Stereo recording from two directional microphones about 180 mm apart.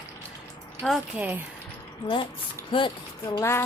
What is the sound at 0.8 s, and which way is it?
Speech, centre (ahead or behind).